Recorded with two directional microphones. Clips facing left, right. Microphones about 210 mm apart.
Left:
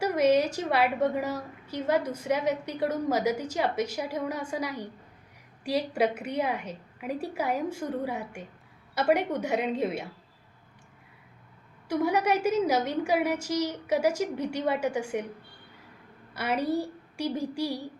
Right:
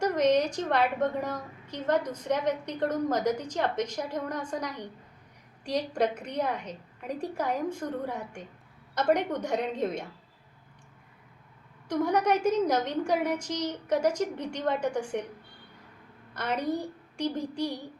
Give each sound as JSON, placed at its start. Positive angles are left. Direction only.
{"t": 0.0, "sound": "a woman's voice", "side_deg": 10}
{"t": 11.9, "sound": "a woman's voice", "side_deg": 10}
{"t": 16.3, "sound": "a woman's voice", "side_deg": 10}